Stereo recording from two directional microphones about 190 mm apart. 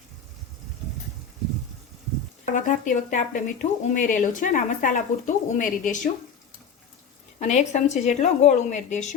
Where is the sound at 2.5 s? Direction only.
40° left (ahead or behind).